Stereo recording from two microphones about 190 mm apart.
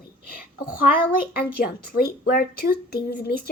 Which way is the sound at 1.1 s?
50° left (ahead or behind).